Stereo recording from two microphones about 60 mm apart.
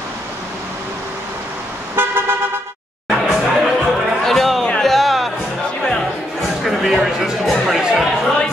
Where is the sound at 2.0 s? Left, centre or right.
Right.